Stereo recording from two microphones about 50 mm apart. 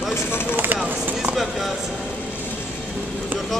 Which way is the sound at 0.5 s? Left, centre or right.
Right.